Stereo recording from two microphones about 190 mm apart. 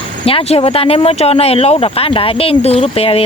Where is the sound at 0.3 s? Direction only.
30° left (ahead or behind).